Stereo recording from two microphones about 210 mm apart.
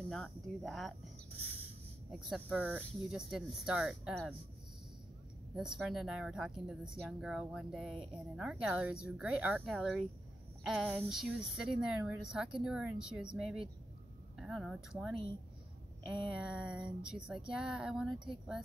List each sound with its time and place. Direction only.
0.1 s speech: centre (ahead or behind)
2.1 s speech: centre (ahead or behind)
5.6 s speech: centre (ahead or behind)
16.3 s speech: 5° right (ahead or behind)